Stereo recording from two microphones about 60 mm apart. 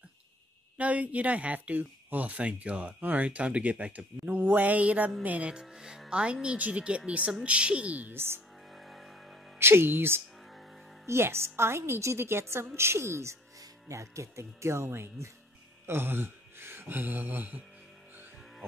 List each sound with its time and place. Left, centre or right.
0.7 s speech: right
5.5 s speech: centre
8.1 s speech: right
8.7 s a sound: centre
9.6 s a woman's voice: right
15.9 s a sound: right